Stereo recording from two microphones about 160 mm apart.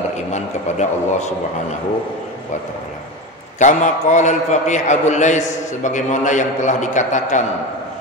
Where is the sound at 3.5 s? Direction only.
50° left (ahead or behind).